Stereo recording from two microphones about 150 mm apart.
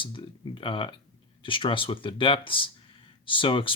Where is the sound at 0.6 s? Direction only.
30° left (ahead or behind).